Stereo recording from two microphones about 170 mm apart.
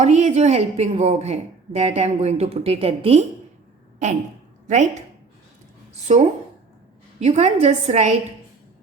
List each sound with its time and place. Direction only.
0.0 s speech: 40° right (ahead or behind)
4.7 s speech: 45° right (ahead or behind)